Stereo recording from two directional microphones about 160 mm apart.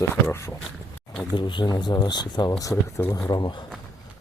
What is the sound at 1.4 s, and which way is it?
Speech, 30° left (ahead or behind).